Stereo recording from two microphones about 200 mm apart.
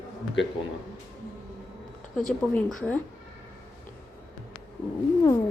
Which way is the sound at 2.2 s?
5° left (ahead or behind).